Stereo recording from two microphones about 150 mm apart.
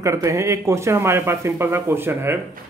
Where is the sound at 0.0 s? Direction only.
20° right (ahead or behind).